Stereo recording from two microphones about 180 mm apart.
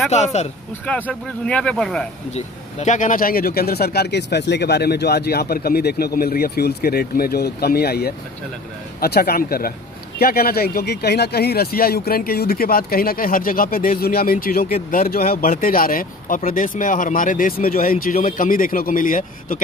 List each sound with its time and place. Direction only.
0.1 s speech: 40° left (ahead or behind)
0.8 s speech: 10° left (ahead or behind)
2.3 s speech: 40° left (ahead or behind)